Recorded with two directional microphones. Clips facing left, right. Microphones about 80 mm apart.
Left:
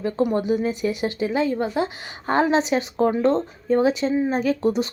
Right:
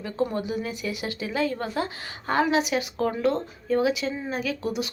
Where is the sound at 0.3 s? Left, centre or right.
Left.